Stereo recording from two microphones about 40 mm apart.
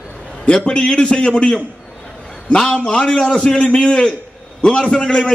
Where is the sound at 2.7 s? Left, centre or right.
Left.